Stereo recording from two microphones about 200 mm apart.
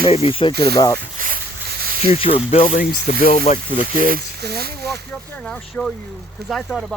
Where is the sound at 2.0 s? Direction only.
30° left (ahead or behind).